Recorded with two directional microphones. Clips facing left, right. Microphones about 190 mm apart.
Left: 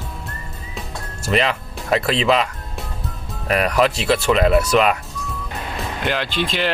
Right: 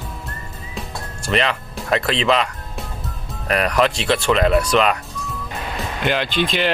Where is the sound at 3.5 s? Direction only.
5° left (ahead or behind).